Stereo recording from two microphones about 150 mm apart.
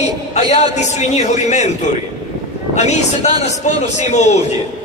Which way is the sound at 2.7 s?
50° left (ahead or behind).